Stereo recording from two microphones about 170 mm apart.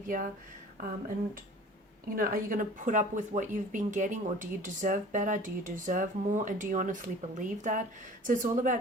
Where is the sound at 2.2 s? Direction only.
55° right (ahead or behind).